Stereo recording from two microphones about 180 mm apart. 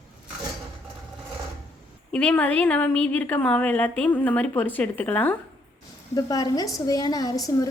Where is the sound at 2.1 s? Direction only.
5° left (ahead or behind).